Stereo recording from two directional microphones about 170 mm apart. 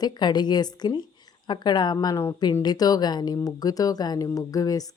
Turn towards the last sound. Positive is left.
turn(degrees=20)  # may be behind; listen again after turning